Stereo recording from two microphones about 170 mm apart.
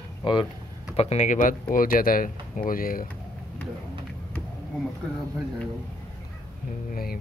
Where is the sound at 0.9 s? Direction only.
40° left (ahead or behind); by 3.0 s 55° left (ahead or behind).